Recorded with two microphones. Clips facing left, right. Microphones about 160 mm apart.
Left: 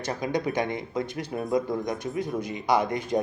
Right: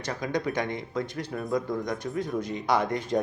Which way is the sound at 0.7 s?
15° left (ahead or behind).